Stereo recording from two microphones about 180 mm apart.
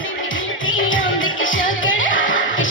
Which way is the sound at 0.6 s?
90° left.